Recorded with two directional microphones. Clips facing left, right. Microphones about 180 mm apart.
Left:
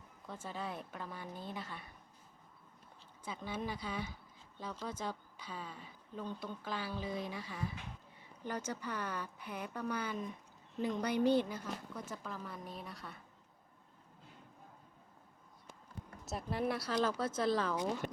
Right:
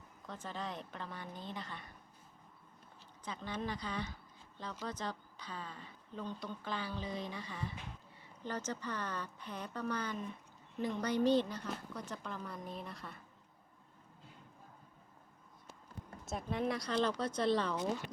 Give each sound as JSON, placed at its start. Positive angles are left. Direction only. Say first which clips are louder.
{"t": 0.3, "sound": "speech", "louder": "even", "side_deg": 10}
{"t": 3.2, "sound": "a woman's voice", "louder": "even", "side_deg": 10}
{"t": 16.2, "sound": "a woman's voice", "louder": "even", "side_deg": 5}
{"t": 18.0, "sound": "a sound", "louder": "left 6 dB", "side_deg": 45}